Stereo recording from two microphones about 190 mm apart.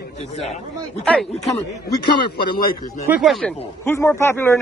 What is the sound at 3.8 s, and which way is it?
Speech, 10° left (ahead or behind).